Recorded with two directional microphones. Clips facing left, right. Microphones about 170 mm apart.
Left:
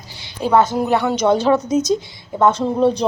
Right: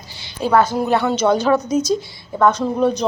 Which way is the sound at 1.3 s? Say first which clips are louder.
Left 1 dB; 25° left (ahead or behind).